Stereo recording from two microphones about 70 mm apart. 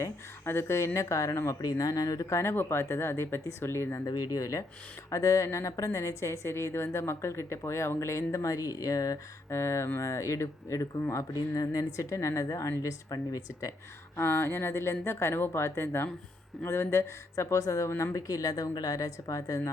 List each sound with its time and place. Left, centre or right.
0.4 s speech: left
0.9 s a woman's voice: left
1.6 s speech: left
2.4 s speech: left
4.0 s a woman's voice: left
9.5 s a woman's voice: left
11.3 s a woman's voice: left
14.2 s a woman's voice: left